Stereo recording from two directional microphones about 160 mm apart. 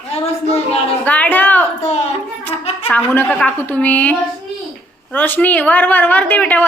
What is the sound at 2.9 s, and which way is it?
A woman's voice, 10° left (ahead or behind).